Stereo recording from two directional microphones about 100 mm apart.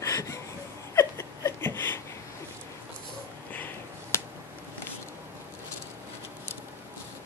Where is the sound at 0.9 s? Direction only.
30° left (ahead or behind).